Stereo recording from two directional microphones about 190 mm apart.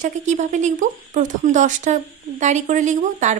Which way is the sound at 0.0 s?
40° right (ahead or behind).